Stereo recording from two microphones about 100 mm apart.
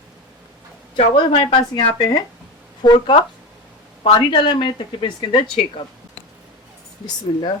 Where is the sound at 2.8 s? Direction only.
55° left (ahead or behind).